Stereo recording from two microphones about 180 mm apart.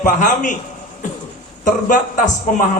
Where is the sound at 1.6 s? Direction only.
45° left (ahead or behind).